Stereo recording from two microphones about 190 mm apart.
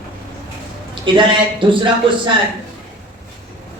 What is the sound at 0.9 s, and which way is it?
Speech, 25° right (ahead or behind).